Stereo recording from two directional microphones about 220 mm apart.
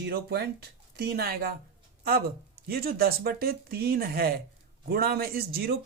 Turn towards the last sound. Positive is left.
turn(degrees=-45)  # may be behind; listen again after turning